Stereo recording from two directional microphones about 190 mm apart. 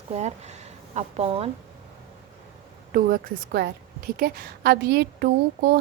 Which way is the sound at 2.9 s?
50° right (ahead or behind).